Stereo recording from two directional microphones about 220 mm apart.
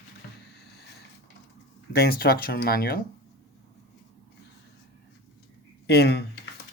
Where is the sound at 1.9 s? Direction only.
45° left (ahead or behind).